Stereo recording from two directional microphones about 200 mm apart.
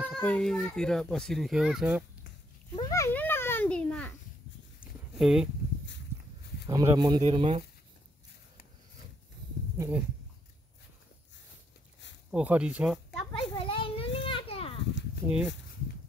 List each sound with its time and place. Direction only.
0.0 s a child's voice: 5° left (ahead or behind)
2.7 s a sound: 15° left (ahead or behind); by 5.5 s 5° right (ahead or behind)
6.7 s speech: 20° right (ahead or behind)
9.8 s a sound: 10° right (ahead or behind)
12.3 s speech: 5° right (ahead or behind)
13.3 s children playing: 25° left (ahead or behind)
15.2 s speech: 5° right (ahead or behind)